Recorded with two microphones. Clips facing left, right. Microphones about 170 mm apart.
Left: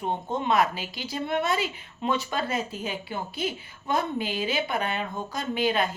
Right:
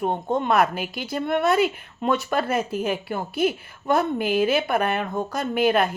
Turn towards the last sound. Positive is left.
turn(degrees=-60)  # may be behind; listen again after turning